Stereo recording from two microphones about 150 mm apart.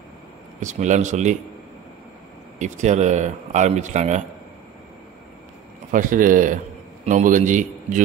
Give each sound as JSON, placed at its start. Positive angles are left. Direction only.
{"t": 0.6, "sound": "speech", "side_deg": -55}
{"t": 2.6, "sound": "speech", "side_deg": -50}
{"t": 5.9, "sound": "a man's voice", "side_deg": -60}